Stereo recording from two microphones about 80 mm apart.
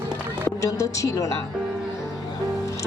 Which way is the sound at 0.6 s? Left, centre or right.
Left.